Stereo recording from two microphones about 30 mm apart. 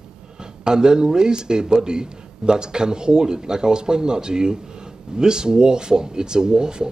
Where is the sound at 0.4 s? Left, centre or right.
Right.